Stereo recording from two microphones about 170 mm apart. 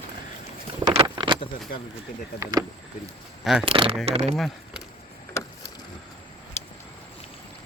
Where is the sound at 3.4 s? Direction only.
Centre (ahead or behind).